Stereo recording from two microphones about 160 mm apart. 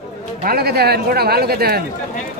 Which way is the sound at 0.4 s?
75° right (ahead or behind).